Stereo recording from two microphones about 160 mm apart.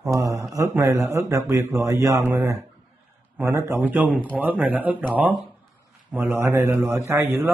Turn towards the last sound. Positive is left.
turn(degrees=-15)  # may be behind; listen again after turning